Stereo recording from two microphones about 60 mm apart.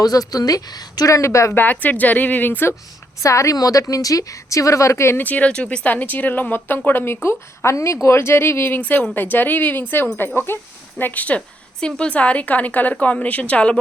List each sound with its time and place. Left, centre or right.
0.0 s a woman's voice: left
1.5 s a woman's voice: left
3.2 s a woman's voice: left
5.1 s a woman's voice: left
5.9 s speech: left
10.9 s a woman's voice: left